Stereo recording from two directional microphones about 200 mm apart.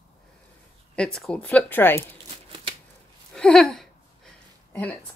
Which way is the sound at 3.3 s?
5° left (ahead or behind).